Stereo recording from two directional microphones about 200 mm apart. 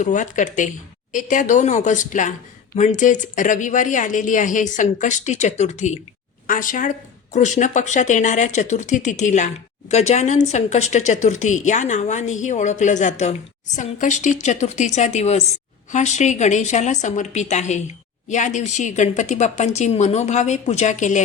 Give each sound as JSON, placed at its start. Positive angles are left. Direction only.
{"t": 0.0, "sound": "a woman's voice", "side_deg": 40}